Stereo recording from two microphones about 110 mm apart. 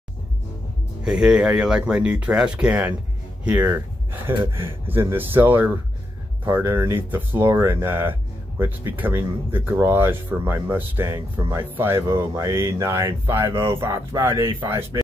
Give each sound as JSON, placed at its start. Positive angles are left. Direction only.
{"t": 1.0, "sound": "speech", "side_deg": -5}